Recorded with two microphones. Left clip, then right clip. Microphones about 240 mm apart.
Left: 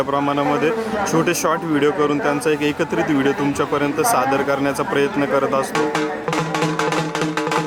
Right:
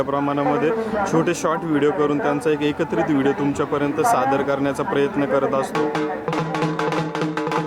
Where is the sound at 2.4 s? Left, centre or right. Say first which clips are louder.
Left 2 dB; centre.